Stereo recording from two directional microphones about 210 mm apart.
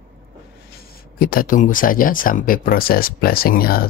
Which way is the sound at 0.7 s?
45° left (ahead or behind).